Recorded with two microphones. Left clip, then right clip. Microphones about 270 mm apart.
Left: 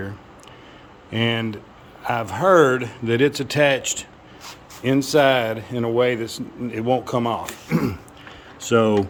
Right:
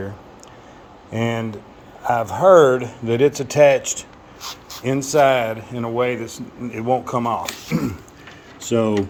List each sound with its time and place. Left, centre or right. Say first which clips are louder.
1.1 s speech: left 1 dB; centre